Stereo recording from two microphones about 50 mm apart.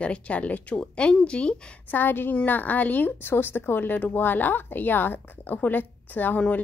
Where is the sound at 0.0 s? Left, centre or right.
Left.